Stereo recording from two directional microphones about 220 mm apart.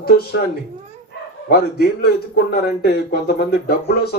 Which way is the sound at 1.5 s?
45° left (ahead or behind).